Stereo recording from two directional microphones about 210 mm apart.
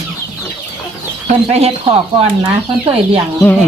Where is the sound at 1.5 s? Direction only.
30° right (ahead or behind).